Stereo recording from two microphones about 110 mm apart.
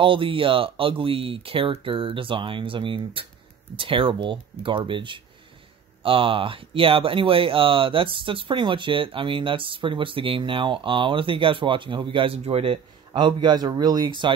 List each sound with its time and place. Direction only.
0.0 s speech: 55° right (ahead or behind)